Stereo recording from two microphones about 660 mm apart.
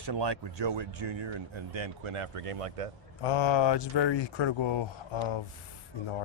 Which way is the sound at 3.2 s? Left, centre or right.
Left.